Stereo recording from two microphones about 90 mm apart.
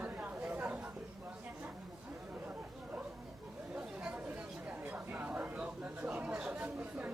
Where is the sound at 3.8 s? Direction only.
10° right (ahead or behind).